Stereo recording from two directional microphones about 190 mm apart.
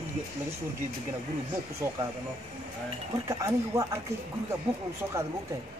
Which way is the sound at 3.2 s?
15° right (ahead or behind).